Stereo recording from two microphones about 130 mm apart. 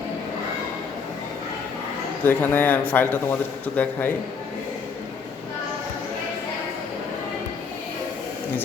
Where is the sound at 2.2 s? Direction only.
15° left (ahead or behind).